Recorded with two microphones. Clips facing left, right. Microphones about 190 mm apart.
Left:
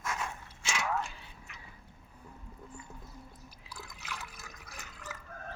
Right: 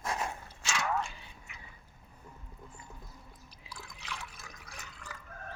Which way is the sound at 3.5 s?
5° left (ahead or behind).